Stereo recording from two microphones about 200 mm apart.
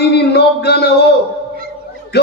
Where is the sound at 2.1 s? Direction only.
55° left (ahead or behind).